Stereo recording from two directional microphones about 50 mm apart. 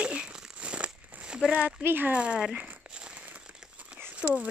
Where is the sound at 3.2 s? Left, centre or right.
Right.